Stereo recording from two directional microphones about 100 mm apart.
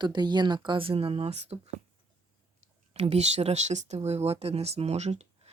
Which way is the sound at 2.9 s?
90° right.